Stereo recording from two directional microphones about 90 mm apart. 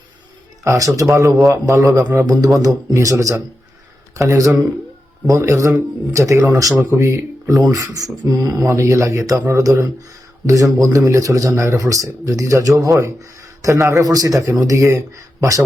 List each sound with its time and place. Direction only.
0.6 s speech: 40° right (ahead or behind)